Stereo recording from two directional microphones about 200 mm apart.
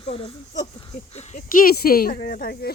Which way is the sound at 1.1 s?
40° left (ahead or behind).